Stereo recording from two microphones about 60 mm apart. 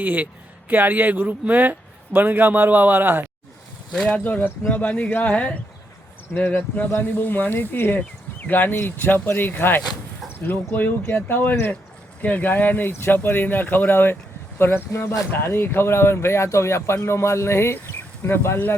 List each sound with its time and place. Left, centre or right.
0.0 s a man's voice: right
4.1 s speech: left
6.4 s speech: left
8.7 s speech: left
15.3 s speech: left